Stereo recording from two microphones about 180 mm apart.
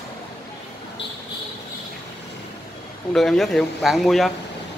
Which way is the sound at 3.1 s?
Centre (ahead or behind).